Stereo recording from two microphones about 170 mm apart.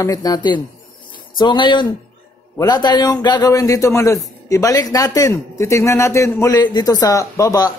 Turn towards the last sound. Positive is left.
turn(degrees=20)  # may be behind; listen again after turning